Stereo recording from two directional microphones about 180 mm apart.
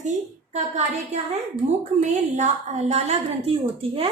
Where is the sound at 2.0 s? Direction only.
40° right (ahead or behind).